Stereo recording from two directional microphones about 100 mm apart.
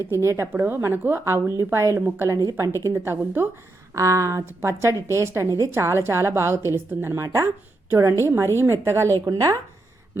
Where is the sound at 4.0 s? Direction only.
30° right (ahead or behind).